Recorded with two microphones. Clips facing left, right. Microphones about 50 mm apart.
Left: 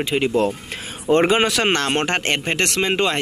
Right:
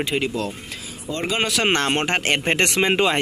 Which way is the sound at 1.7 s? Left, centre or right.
Centre.